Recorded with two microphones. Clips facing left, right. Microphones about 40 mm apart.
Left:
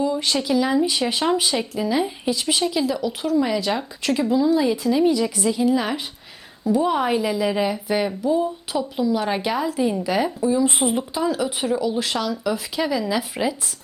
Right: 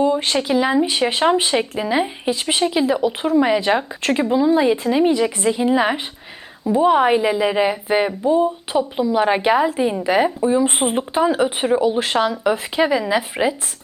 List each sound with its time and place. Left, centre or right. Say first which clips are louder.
0.0 s speech: right 4 dB; right